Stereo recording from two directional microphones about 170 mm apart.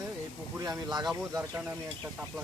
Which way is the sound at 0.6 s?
20° right (ahead or behind).